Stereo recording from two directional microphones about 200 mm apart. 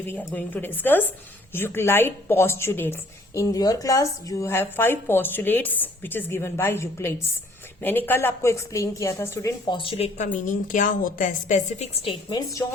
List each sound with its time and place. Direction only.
0.1 s a woman's voice: 10° left (ahead or behind)